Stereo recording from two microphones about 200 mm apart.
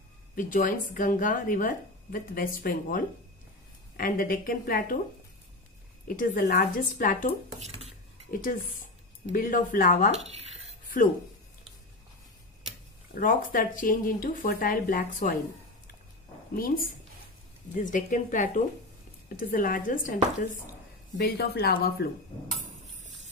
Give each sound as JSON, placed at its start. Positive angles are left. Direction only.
{"t": 0.4, "sound": "speech", "side_deg": 40}
{"t": 6.0, "sound": "speech", "side_deg": 45}
{"t": 7.5, "sound": "speech", "side_deg": -35}
{"t": 8.3, "sound": "speech", "side_deg": 45}
{"t": 10.1, "sound": "speech", "side_deg": -35}
{"t": 13.1, "sound": "speech", "side_deg": 45}
{"t": 16.5, "sound": "a woman's voice", "side_deg": 45}
{"t": 21.2, "sound": "speech", "side_deg": 50}